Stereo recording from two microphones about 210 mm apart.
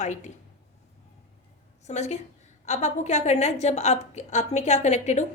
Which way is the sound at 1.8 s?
30° left (ahead or behind).